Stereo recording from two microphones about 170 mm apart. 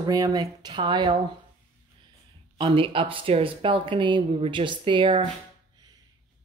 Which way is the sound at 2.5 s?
30° right (ahead or behind).